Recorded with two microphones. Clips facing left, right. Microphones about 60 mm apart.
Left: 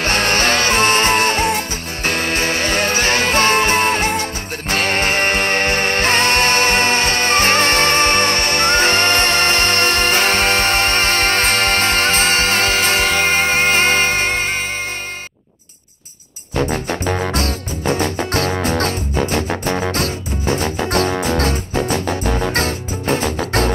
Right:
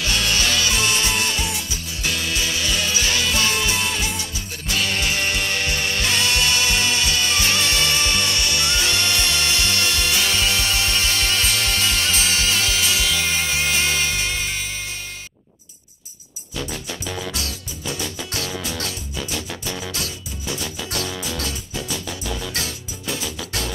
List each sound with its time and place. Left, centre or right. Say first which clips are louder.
0.0 s music: left 6 dB; left
16.5 s music: left 11 dB; left